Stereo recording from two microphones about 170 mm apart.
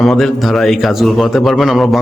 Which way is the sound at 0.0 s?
Centre (ahead or behind).